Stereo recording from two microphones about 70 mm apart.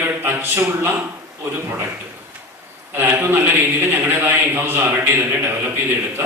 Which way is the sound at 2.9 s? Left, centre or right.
Right.